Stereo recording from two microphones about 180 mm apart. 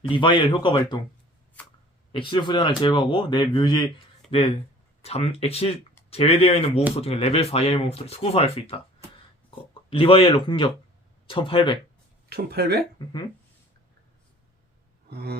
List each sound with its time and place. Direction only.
0.0 s speech: 25° left (ahead or behind)
2.1 s speech: 25° left (ahead or behind)
9.9 s speech: 30° left (ahead or behind)
12.3 s speech: 60° right (ahead or behind)
15.1 s a sound: 60° right (ahead or behind)